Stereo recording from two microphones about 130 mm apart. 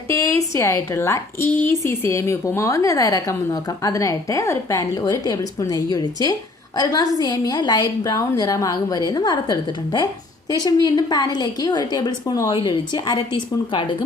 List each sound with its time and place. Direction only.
0.1 s a woman's voice: 20° left (ahead or behind)